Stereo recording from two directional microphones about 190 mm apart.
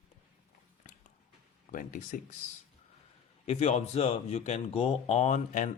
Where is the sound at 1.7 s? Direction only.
45° left (ahead or behind).